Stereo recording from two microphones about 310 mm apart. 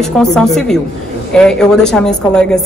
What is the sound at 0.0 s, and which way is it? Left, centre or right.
A woman's voice, centre.